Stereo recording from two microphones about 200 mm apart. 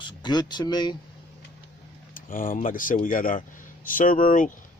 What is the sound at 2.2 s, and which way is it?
Speech, 45° left (ahead or behind).